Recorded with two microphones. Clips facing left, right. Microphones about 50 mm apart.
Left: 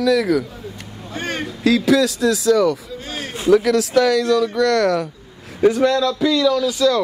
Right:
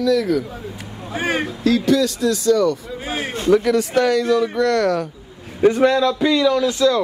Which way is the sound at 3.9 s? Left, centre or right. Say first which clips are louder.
Left 2 dB; centre.